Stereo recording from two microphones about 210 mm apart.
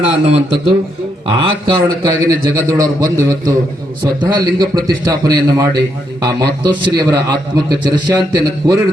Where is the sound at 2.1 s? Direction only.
15° right (ahead or behind).